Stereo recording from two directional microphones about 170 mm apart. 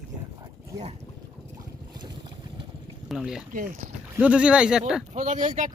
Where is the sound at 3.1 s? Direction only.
Centre (ahead or behind).